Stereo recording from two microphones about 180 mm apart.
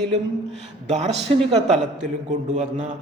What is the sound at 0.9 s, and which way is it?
Speech, 35° right (ahead or behind).